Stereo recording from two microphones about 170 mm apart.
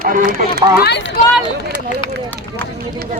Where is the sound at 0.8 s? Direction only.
70° left (ahead or behind).